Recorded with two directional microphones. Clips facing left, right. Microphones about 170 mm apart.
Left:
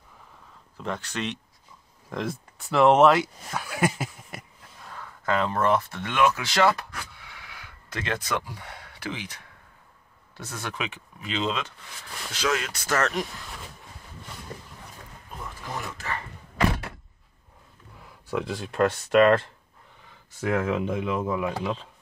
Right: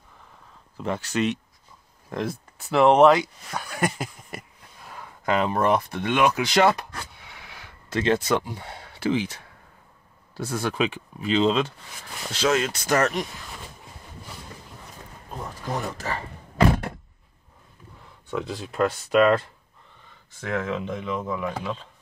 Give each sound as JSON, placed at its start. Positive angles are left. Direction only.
{"t": 0.7, "sound": "speech", "side_deg": -5}
{"t": 4.8, "sound": "speech", "side_deg": -15}
{"t": 7.0, "sound": "a sound", "side_deg": -25}
{"t": 10.3, "sound": "speech", "side_deg": -30}
{"t": 13.1, "sound": "speech", "side_deg": 0}
{"t": 15.9, "sound": "speech", "side_deg": -35}
{"t": 18.0, "sound": "speech", "side_deg": 5}